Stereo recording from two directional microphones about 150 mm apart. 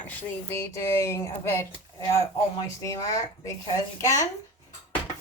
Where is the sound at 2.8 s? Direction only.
20° left (ahead or behind).